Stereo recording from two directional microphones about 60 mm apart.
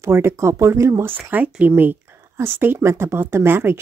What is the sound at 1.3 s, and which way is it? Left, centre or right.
Speech, right.